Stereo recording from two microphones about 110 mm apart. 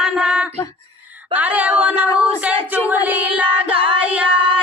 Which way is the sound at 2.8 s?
15° right (ahead or behind).